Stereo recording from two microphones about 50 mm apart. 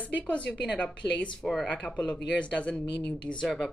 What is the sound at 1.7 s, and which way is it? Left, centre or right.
Speech, left.